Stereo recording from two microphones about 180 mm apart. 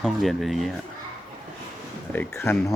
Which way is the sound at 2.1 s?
15° left (ahead or behind).